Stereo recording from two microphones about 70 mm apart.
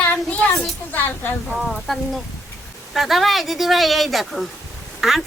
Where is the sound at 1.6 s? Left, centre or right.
Centre.